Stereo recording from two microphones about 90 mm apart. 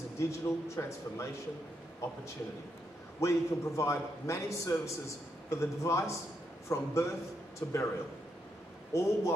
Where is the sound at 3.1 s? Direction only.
35° left (ahead or behind).